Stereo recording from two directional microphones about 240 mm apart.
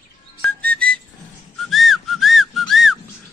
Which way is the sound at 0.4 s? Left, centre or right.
Centre.